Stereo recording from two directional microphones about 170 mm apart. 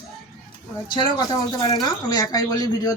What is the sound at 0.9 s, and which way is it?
Speech, 25° left (ahead or behind).